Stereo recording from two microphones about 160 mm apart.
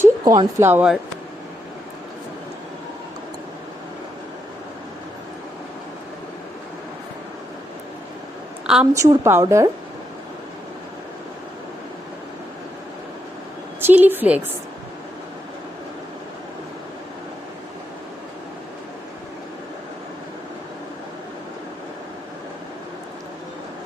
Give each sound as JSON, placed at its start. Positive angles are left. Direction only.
{"t": 0.0, "sound": "speech", "side_deg": -20}
{"t": 8.6, "sound": "a woman's voice", "side_deg": -5}
{"t": 9.0, "sound": "a woman's voice", "side_deg": -20}
{"t": 13.8, "sound": "a woman's voice", "side_deg": -10}